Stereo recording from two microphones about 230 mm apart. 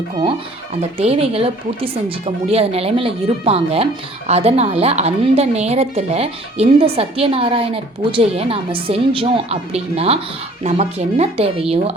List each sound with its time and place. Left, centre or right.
0.9 s a woman's voice: right